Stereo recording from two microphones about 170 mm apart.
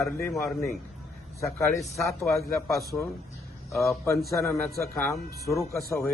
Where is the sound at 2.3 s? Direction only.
20° left (ahead or behind).